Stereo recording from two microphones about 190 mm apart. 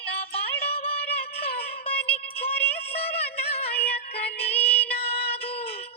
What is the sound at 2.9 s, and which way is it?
Music, 30° left (ahead or behind).